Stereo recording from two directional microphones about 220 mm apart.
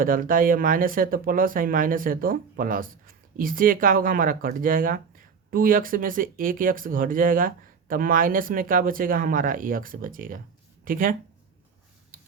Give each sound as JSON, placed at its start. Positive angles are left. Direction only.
{"t": 0.0, "sound": "speech", "side_deg": -40}
{"t": 12.1, "sound": "tick-tock", "side_deg": -40}